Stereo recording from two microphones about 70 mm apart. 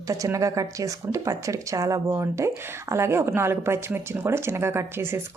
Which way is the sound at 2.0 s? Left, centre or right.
Right.